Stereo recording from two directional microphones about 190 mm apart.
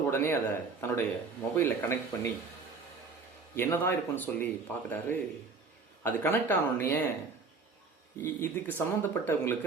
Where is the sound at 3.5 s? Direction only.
10° left (ahead or behind).